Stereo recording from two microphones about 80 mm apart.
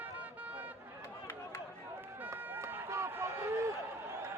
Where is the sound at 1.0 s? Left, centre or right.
Left.